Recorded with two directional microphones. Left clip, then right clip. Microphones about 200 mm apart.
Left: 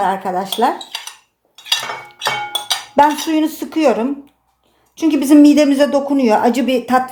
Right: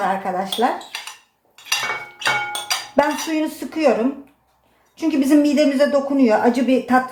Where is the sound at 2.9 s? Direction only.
45° left (ahead or behind).